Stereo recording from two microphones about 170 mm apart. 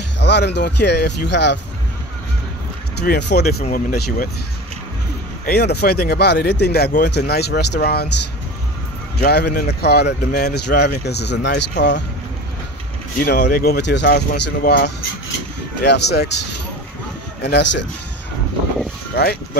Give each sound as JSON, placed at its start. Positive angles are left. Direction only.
{"t": 0.2, "sound": "speech", "side_deg": 80}
{"t": 3.0, "sound": "speech", "side_deg": 80}
{"t": 3.7, "sound": "speech", "side_deg": 55}
{"t": 5.4, "sound": "speech", "side_deg": 70}
{"t": 9.2, "sound": "speech", "side_deg": 65}
{"t": 13.2, "sound": "speech", "side_deg": 70}
{"t": 15.8, "sound": "speech", "side_deg": 75}
{"t": 17.4, "sound": "speech", "side_deg": 85}